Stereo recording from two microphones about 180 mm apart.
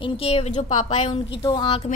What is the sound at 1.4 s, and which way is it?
Speech, 25° left (ahead or behind).